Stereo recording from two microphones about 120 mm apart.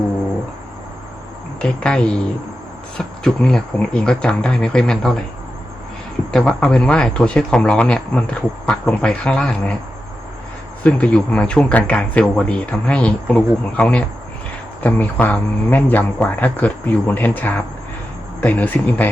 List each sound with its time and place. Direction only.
1.6 s speech: 10° left (ahead or behind)
6.3 s speech: 5° left (ahead or behind)
10.8 s speech: 10° left (ahead or behind)